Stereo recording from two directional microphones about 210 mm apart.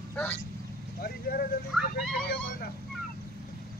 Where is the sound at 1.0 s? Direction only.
45° left (ahead or behind).